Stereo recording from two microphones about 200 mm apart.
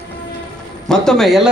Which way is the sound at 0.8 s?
Centre (ahead or behind).